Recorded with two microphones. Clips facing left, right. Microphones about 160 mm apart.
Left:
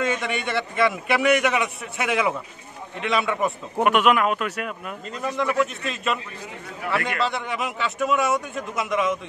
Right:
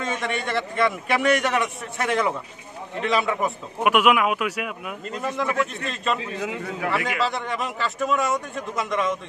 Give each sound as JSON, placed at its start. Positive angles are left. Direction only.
{"t": 0.0, "sound": "a man's voice", "side_deg": 0}
{"t": 6.4, "sound": "a man's voice", "side_deg": -90}
{"t": 6.9, "sound": "a man's voice", "side_deg": 0}